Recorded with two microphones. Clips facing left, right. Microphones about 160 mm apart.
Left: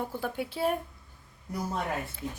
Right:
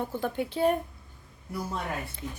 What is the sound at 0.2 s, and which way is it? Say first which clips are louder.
Speech: right 5 dB; 5° left (ahead or behind).